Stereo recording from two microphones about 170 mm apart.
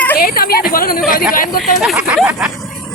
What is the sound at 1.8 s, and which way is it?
Speech, 5° right (ahead or behind).